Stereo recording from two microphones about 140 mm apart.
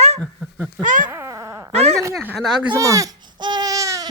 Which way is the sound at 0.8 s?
65° right (ahead or behind).